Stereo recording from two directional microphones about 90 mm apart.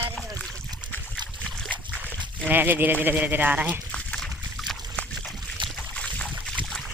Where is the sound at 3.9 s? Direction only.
5° left (ahead or behind).